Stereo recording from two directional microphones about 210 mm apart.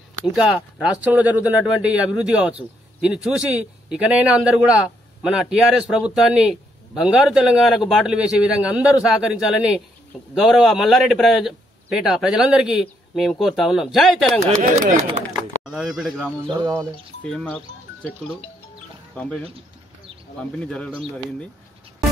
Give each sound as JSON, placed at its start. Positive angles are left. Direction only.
{"t": 0.2, "sound": "speech", "side_deg": -5}
{"t": 15.6, "sound": "speech", "side_deg": -5}
{"t": 16.4, "sound": "speech", "side_deg": -20}
{"t": 17.2, "sound": "speech", "side_deg": 5}
{"t": 20.5, "sound": "speech", "side_deg": 5}